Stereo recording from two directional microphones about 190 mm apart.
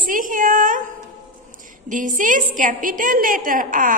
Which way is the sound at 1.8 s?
45° right (ahead or behind).